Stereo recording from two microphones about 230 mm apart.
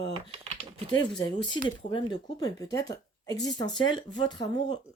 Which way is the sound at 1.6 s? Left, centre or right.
Centre.